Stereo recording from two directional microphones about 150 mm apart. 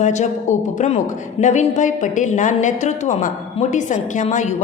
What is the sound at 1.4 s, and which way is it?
A woman's voice, 55° left (ahead or behind).